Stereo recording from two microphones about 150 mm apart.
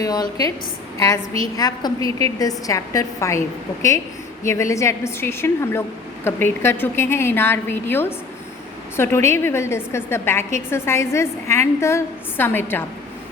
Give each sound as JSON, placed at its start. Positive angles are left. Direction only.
{"t": 0.0, "sound": "a woman's voice", "side_deg": 25}
{"t": 4.4, "sound": "a woman's voice", "side_deg": 20}